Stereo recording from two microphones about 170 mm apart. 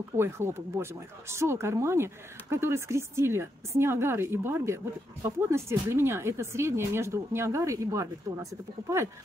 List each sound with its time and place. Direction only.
0.2 s speech: 15° right (ahead or behind)